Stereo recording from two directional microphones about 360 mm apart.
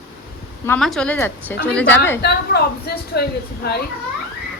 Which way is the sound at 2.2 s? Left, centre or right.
Left.